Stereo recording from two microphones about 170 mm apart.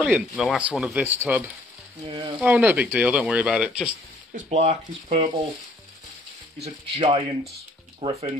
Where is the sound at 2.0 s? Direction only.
30° right (ahead or behind).